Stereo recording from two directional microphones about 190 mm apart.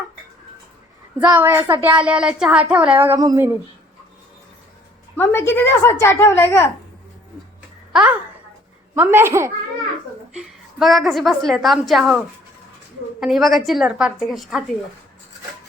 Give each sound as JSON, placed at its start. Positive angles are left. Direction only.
{"t": 1.2, "sound": "speech", "side_deg": -10}
{"t": 5.1, "sound": "a woman's voice", "side_deg": 10}
{"t": 9.0, "sound": "speech", "side_deg": -10}
{"t": 10.3, "sound": "a woman's voice", "side_deg": 0}